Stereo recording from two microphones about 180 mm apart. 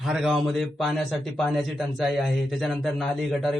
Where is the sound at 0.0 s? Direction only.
Centre (ahead or behind).